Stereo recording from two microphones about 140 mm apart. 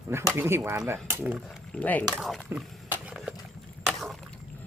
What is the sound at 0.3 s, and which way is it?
Speech, 15° right (ahead or behind).